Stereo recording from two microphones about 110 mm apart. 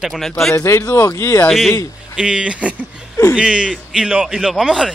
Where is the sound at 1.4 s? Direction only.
Centre (ahead or behind).